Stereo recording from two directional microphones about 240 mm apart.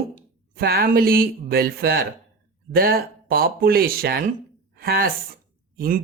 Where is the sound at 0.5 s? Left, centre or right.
Right.